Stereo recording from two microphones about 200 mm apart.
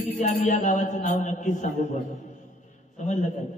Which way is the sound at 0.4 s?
40° left (ahead or behind).